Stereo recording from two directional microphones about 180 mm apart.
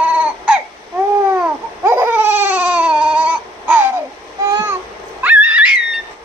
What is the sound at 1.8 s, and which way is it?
Baby cry, 15° right (ahead or behind).